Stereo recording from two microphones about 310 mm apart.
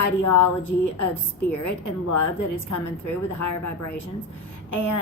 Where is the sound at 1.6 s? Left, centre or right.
Left.